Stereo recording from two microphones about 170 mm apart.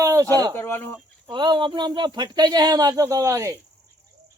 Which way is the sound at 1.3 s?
25° right (ahead or behind).